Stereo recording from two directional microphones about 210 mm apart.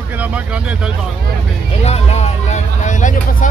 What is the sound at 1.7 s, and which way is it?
Vehicle, 30° left (ahead or behind).